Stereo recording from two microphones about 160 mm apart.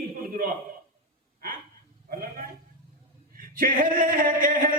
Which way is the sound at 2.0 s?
65° right (ahead or behind).